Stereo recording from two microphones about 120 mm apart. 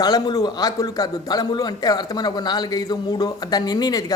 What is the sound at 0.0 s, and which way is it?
A man's voice, 30° left (ahead or behind).